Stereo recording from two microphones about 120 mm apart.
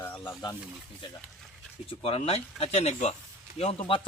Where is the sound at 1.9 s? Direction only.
50° left (ahead or behind).